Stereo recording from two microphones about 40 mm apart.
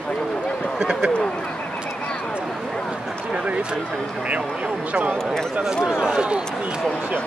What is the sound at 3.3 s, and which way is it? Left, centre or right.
Speech, right.